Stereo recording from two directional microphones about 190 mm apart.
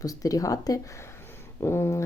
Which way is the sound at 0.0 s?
20° left (ahead or behind).